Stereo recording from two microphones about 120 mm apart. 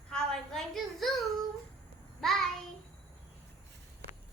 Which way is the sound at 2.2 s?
5° left (ahead or behind).